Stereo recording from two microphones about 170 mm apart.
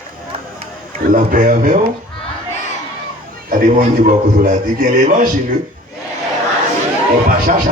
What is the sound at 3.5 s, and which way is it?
A man's voice, 50° right (ahead or behind).